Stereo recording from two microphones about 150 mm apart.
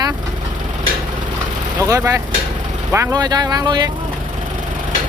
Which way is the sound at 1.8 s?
20° right (ahead or behind).